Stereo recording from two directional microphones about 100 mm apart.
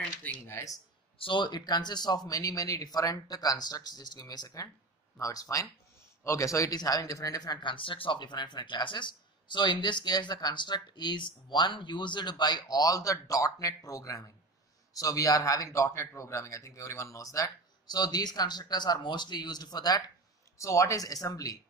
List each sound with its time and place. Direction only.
0.5 s speech: 30° left (ahead or behind)
1.1 s speech: 55° left (ahead or behind); by 21.5 s 35° left (ahead or behind)